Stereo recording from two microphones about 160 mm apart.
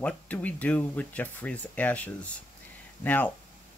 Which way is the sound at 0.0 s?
10° left (ahead or behind).